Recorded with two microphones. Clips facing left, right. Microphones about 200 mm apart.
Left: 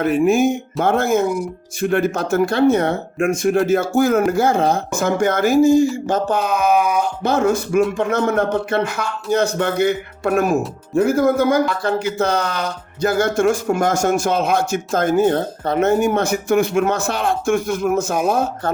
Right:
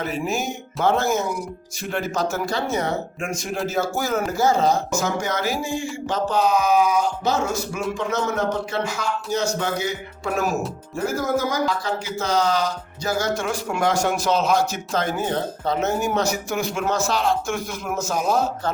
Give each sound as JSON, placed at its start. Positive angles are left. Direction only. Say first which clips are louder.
{"t": 0.0, "sound": "speech", "louder": "left 11 dB", "side_deg": 55}